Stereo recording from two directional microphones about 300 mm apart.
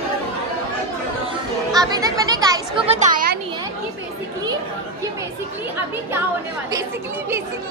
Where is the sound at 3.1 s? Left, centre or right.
Right.